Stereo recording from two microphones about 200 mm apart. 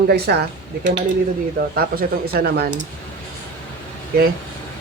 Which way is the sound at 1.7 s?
50° right (ahead or behind).